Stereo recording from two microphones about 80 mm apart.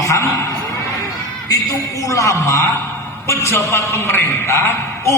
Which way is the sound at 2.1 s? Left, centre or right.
Left.